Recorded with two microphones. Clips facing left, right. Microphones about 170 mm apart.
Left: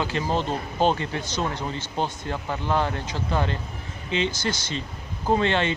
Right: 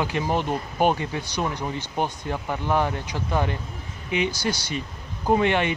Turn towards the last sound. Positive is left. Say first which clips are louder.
# right 1 dB
turn(degrees=-15)  # may be behind; listen again after turning